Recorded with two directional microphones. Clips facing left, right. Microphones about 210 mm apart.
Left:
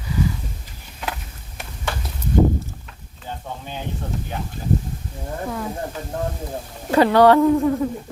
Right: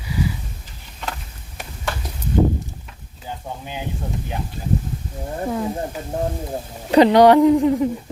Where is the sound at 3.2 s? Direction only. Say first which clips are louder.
Right 1 dB; 10° right (ahead or behind).